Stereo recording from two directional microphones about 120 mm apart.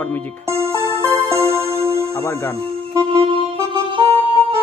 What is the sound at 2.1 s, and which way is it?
Speech, 20° left (ahead or behind).